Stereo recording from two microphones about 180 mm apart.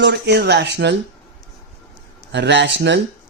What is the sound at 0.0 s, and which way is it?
Speech, 65° right (ahead or behind).